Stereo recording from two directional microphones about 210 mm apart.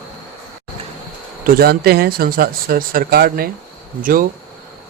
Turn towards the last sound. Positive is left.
turn(degrees=-40)  # may be behind; listen again after turning